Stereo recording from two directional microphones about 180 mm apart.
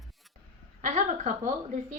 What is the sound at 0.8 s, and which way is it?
Speech, 40° right (ahead or behind).